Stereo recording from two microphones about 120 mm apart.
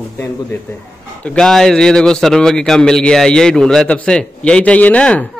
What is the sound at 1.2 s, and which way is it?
A man's voice, 10° left (ahead or behind).